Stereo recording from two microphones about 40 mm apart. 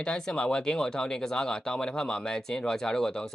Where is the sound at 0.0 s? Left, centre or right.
Left.